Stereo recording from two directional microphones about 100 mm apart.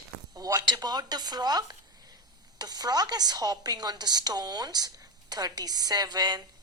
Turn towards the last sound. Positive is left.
turn(degrees=-45)  # may be behind; listen again after turning